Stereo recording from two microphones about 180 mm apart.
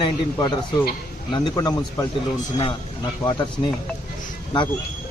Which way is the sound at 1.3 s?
20° left (ahead or behind).